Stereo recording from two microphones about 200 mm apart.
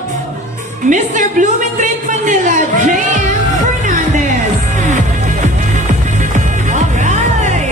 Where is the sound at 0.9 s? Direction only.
40° right (ahead or behind).